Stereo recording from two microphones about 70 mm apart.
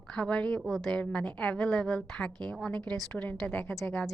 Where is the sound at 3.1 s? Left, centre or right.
Left.